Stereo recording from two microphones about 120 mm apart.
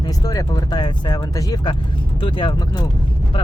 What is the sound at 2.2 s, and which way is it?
Speech, 45° left (ahead or behind).